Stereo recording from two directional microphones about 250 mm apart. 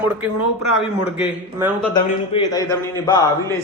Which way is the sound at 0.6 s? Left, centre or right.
Left.